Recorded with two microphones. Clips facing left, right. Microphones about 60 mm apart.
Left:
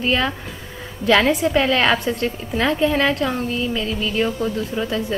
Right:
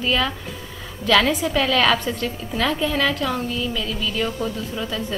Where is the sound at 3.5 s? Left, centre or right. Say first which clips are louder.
Left 3 dB; left.